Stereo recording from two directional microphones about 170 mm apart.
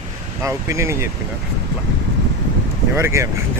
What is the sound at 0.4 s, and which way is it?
Speech, 15° right (ahead or behind).